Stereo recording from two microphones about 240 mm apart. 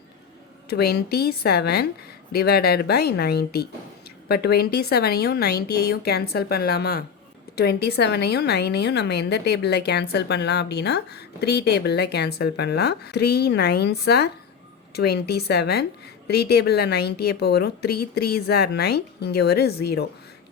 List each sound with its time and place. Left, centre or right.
0.7 s a woman's voice: left